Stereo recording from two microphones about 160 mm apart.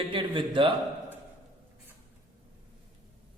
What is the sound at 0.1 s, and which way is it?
Speech, 30° right (ahead or behind).